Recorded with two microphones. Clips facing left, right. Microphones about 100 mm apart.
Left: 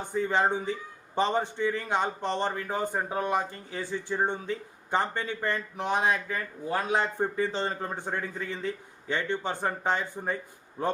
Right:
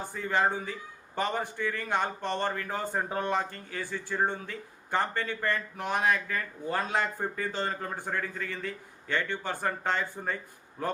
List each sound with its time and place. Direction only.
0.0 s a man's voice: 20° left (ahead or behind)